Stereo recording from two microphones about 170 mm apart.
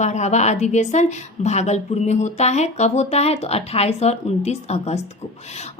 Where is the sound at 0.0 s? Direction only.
45° left (ahead or behind).